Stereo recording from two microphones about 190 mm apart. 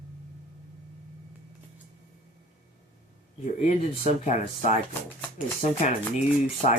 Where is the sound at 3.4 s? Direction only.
40° left (ahead or behind).